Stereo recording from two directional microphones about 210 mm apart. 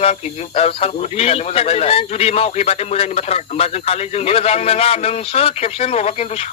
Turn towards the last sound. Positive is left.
turn(degrees=30)  # may be behind; listen again after turning